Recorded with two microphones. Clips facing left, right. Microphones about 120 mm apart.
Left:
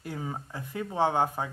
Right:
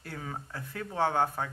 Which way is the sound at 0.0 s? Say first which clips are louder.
Left 4 dB; 15° left (ahead or behind).